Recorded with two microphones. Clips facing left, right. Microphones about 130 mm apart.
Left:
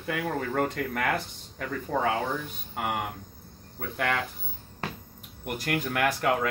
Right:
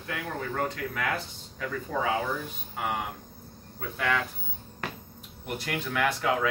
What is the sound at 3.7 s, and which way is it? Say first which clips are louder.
Speech: even; 55° left (ahead or behind).